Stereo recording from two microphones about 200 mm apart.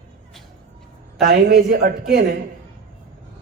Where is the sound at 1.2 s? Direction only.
50° right (ahead or behind).